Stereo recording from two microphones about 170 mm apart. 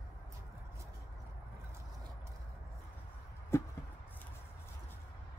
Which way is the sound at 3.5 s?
15° left (ahead or behind).